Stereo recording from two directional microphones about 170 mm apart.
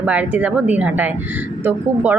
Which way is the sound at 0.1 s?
10° right (ahead or behind).